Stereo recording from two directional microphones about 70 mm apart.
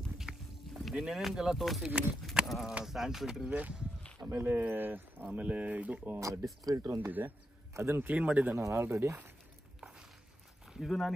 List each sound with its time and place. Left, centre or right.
0.2 s a sound: centre
0.9 s speech: centre
3.4 s speech: right
6.1 s speech: right
6.8 s speech: right
7.1 s speech: right
7.7 s speech: right
8.0 s speech: right
8.5 s speech: right
9.8 s walk: centre
10.7 s speech: centre